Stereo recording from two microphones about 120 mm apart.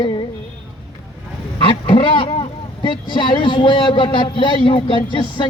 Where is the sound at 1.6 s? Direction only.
45° left (ahead or behind).